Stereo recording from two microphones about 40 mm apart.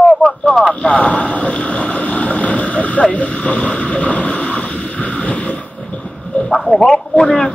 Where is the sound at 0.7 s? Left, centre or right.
Left.